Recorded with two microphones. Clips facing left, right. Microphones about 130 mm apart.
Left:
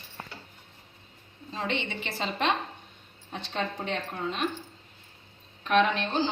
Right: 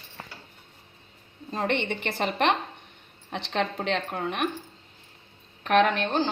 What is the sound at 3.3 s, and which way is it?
A woman's voice, 80° right.